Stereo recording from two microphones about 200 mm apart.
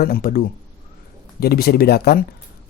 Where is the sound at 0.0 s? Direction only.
45° left (ahead or behind).